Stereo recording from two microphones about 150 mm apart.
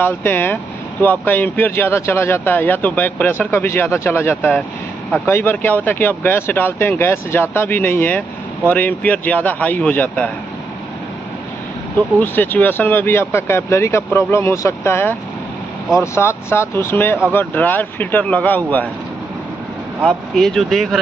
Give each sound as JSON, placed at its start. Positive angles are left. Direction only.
{"t": 0.0, "sound": "speech", "side_deg": 15}
{"t": 12.2, "sound": "speech", "side_deg": 10}
{"t": 20.1, "sound": "speech", "side_deg": 5}